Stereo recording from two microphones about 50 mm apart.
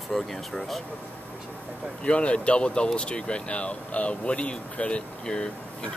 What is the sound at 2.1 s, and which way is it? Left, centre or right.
Speech, left.